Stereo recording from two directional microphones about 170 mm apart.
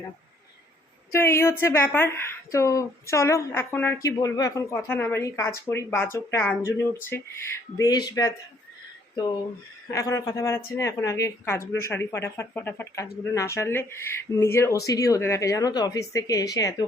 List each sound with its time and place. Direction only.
1.1 s a woman's voice: 15° left (ahead or behind)
9.9 s a woman's voice: 20° left (ahead or behind)